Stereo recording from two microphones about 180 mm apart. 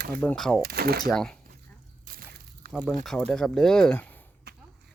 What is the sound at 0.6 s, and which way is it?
Speech, 60° right (ahead or behind).